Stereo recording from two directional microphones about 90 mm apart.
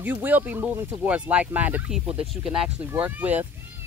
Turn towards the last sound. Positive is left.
turn(degrees=-20)  # may be behind; listen again after turning